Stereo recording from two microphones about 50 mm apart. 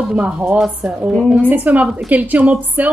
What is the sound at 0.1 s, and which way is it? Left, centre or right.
A woman's voice, right.